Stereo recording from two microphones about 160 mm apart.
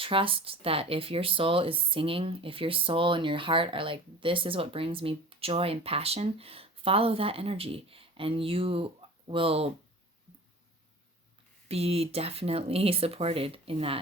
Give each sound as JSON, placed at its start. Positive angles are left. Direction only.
{"t": 0.0, "sound": "speech", "side_deg": -35}
{"t": 11.7, "sound": "speech", "side_deg": -40}